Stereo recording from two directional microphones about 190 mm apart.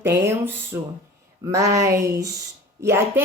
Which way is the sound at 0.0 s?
10° right (ahead or behind).